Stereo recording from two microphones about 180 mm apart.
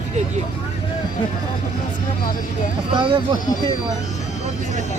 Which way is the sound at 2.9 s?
25° right (ahead or behind).